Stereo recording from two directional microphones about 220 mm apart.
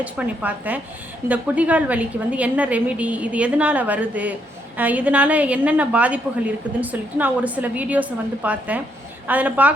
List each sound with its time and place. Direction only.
0.0 s a woman's voice: 5° right (ahead or behind)